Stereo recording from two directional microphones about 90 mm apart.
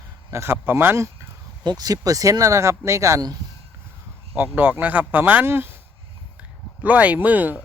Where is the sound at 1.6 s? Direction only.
50° right (ahead or behind); by 3.3 s 35° right (ahead or behind).